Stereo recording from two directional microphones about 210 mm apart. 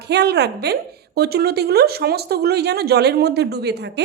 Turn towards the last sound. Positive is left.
turn(degrees=-50)  # may be behind; listen again after turning